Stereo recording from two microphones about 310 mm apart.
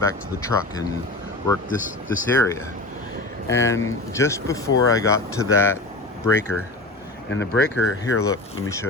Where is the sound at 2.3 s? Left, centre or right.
Centre.